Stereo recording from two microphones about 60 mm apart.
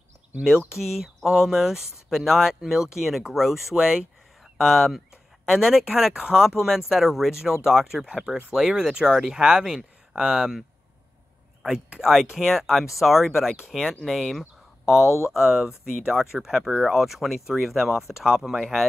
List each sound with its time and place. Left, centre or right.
0.7 s speech: centre
11.6 s speech: centre
15.0 s speech: left
15.8 s speech: centre